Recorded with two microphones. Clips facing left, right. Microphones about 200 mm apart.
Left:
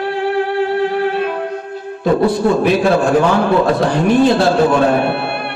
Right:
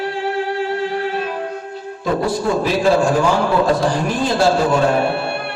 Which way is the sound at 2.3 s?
60° left (ahead or behind).